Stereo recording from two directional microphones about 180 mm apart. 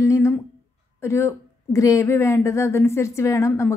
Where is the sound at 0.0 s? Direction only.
15° left (ahead or behind).